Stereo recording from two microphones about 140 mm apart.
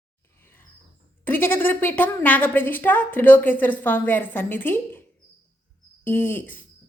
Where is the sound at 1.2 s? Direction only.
15° left (ahead or behind).